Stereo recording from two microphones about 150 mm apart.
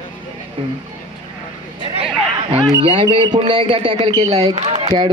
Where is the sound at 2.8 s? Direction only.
35° right (ahead or behind).